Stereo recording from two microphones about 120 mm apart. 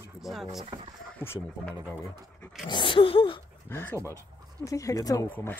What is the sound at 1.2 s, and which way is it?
Speech, 20° left (ahead or behind).